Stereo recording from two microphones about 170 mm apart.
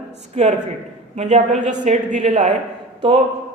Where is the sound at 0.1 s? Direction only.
40° right (ahead or behind).